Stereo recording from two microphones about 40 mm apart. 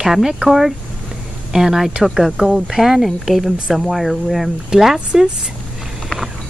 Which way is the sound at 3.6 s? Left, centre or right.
Centre.